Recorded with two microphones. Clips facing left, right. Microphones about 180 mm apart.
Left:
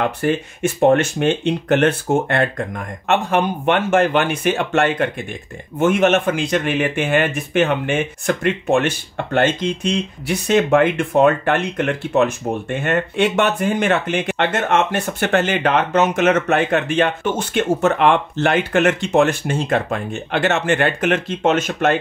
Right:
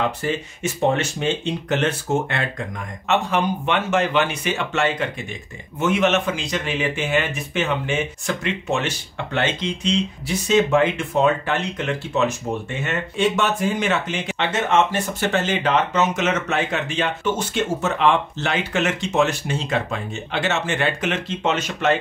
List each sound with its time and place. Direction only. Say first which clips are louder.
0.0 s speech: left 4 dB; 55° left (ahead or behind)